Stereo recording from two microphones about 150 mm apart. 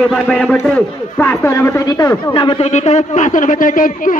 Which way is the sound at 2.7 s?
50° left (ahead or behind).